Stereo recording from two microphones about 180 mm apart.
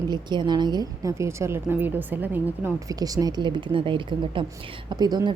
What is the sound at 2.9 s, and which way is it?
A woman's voice, 20° right (ahead or behind).